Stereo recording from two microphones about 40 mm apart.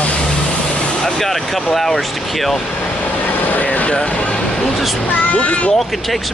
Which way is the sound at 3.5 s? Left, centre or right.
Left.